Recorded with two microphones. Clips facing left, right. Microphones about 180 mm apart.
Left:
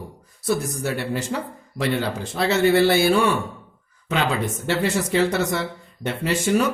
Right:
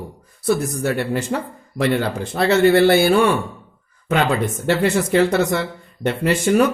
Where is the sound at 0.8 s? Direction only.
55° right (ahead or behind).